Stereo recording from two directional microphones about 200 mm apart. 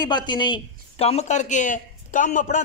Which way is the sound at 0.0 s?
20° left (ahead or behind).